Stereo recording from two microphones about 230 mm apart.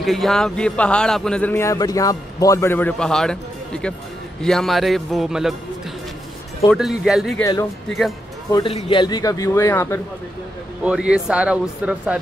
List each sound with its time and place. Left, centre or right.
0.0 s a man's voice: centre
6.7 s a man's voice: centre
8.5 s speech: centre
10.8 s a man's voice: centre